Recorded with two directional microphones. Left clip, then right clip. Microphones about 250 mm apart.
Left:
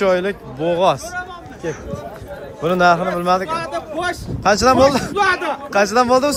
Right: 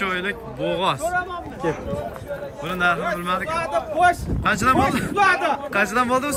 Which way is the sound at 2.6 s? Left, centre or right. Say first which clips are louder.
Left 7 dB; centre.